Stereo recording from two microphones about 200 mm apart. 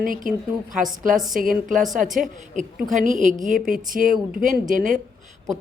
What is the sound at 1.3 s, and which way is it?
A woman's voice, 45° right (ahead or behind).